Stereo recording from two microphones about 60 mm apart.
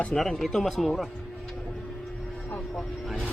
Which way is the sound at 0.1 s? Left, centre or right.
Centre.